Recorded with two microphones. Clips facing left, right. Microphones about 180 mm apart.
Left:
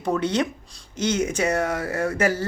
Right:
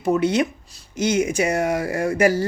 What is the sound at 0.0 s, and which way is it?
Speech, 10° right (ahead or behind).